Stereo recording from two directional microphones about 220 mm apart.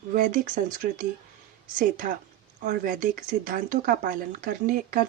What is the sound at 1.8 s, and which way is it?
Speech, 40° right (ahead or behind).